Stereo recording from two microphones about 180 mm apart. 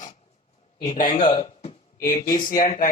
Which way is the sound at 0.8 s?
45° left (ahead or behind).